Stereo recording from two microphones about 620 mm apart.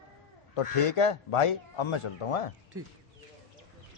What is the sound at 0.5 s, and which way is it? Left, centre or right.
Speech, left.